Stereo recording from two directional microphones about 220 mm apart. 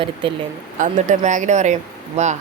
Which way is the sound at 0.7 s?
35° right (ahead or behind).